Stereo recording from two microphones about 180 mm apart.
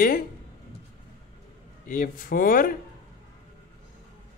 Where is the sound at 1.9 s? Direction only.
50° left (ahead or behind).